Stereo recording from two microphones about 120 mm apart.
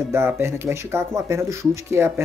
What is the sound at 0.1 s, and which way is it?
Speech, 20° right (ahead or behind).